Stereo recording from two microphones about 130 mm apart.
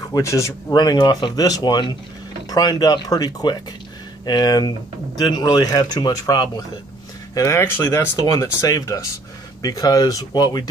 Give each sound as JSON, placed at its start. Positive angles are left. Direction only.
{"t": 0.1, "sound": "speech", "side_deg": 25}
{"t": 7.3, "sound": "speech", "side_deg": 20}